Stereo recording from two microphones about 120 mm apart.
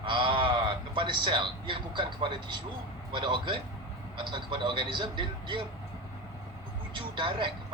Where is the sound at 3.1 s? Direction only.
40° right (ahead or behind).